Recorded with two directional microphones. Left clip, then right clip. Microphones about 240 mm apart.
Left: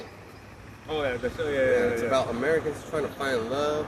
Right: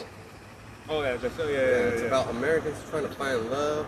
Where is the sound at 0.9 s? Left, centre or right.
Centre.